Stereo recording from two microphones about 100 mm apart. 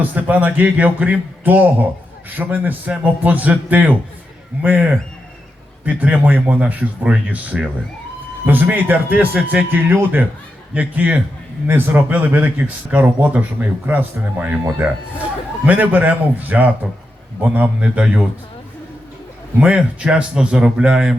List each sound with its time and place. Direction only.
0.0 s a man's voice: 15° right (ahead or behind)
19.5 s a man's voice: 10° right (ahead or behind)